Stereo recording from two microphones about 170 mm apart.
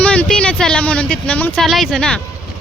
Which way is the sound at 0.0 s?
5° left (ahead or behind).